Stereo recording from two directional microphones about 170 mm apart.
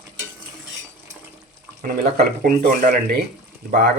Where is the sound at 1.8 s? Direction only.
60° right (ahead or behind).